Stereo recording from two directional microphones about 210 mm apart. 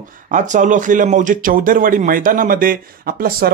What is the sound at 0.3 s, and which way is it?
Speech, 35° right (ahead or behind).